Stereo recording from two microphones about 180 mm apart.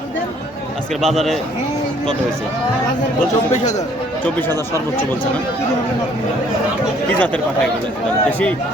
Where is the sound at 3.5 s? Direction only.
40° left (ahead or behind).